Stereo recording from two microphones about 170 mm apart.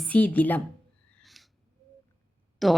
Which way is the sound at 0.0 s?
10° left (ahead or behind).